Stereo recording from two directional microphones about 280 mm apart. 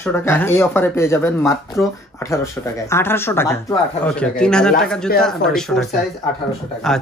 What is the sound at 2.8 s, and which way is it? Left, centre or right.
Speech, centre.